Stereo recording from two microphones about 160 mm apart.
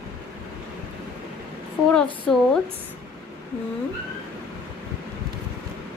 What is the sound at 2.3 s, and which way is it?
Speech, 5° left (ahead or behind).